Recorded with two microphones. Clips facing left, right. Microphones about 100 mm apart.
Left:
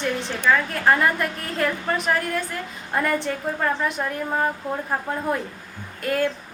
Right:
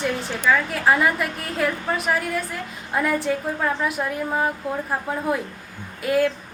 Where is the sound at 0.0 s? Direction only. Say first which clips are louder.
Even; 5° right (ahead or behind).